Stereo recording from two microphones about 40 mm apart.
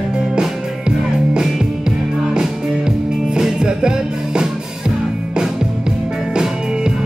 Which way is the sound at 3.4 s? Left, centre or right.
Centre.